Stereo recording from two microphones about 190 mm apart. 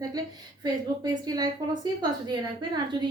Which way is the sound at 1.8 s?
20° right (ahead or behind).